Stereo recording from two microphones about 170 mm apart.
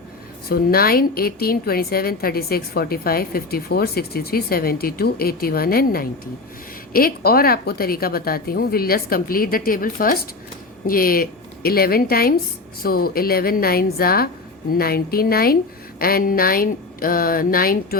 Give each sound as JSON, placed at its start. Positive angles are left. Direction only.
{"t": 0.4, "sound": "a woman's voice", "side_deg": 65}